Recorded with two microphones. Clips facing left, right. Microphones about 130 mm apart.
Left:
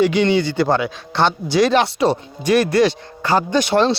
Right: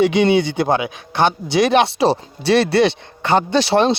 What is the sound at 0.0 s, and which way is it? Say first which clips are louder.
Speech: right 1 dB; 20° right (ahead or behind).